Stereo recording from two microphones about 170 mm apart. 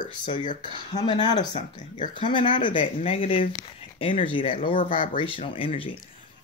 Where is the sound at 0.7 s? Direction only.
25° left (ahead or behind).